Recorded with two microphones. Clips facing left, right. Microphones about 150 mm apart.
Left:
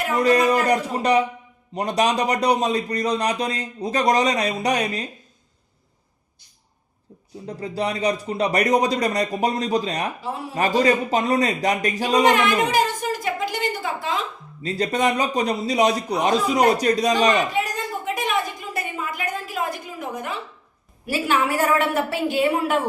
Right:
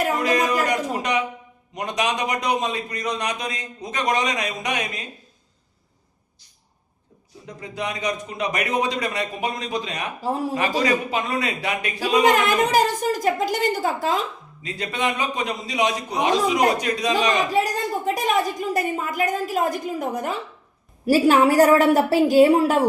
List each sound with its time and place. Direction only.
0.2 s a man's voice: 40° left (ahead or behind)
7.4 s a man's voice: 35° left (ahead or behind)
10.2 s a woman's voice: 40° right (ahead or behind)
10.8 s a man's voice: 40° left (ahead or behind)
12.3 s a woman's voice: 40° right (ahead or behind)
14.6 s a man's voice: 35° left (ahead or behind)
17.5 s a woman's voice: 40° right (ahead or behind)